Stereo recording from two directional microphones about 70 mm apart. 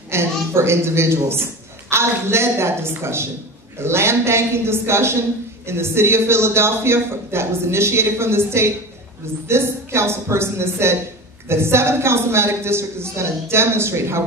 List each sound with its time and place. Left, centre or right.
0.1 s a man's voice: right